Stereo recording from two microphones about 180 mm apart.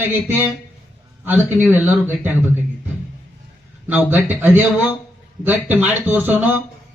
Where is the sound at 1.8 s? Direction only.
10° right (ahead or behind).